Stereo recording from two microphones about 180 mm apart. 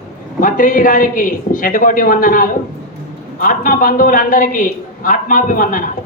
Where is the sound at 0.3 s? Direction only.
50° left (ahead or behind).